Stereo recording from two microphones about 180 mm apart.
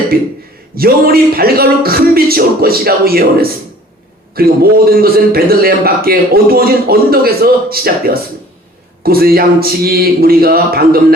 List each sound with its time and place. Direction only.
0.1 s a man's voice: 55° right (ahead or behind)